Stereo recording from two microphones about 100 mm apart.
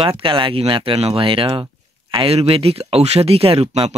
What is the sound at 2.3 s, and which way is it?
Speech, 85° right.